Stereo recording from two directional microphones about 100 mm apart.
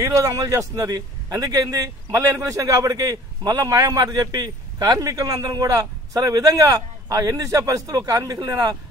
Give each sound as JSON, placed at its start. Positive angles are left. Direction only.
{"t": 0.0, "sound": "a man's voice", "side_deg": -35}